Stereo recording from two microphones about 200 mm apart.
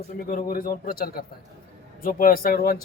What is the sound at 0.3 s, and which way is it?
Speech, 45° left (ahead or behind).